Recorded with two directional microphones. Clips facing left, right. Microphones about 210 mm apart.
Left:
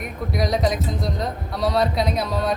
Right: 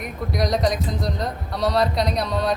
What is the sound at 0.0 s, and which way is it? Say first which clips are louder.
Speech: even; centre (ahead or behind).